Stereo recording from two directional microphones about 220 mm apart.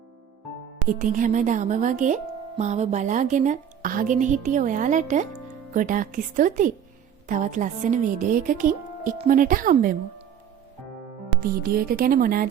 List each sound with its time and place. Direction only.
0.9 s speech: 35° right (ahead or behind)
11.3 s speech: 40° right (ahead or behind)